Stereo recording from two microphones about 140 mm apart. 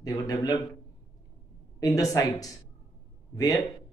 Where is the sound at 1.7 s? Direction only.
25° left (ahead or behind).